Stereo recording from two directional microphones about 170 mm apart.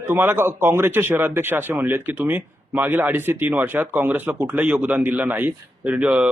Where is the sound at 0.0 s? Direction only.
15° right (ahead or behind).